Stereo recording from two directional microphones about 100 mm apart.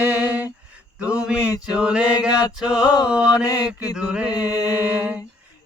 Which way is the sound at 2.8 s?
40° left (ahead or behind).